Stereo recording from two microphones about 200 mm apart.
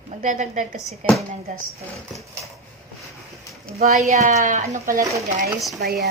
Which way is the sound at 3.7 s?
35° right (ahead or behind).